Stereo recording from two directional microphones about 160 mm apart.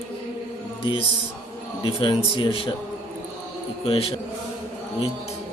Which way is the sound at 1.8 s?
30° left (ahead or behind).